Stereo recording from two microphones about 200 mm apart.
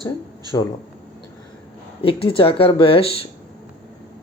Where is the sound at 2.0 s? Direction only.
30° left (ahead or behind).